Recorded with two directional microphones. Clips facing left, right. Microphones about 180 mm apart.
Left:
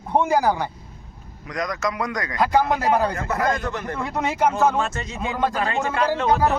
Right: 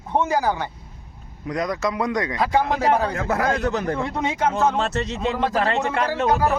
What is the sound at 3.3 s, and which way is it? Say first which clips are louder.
Speech: right 2 dB; 75° right (ahead or behind).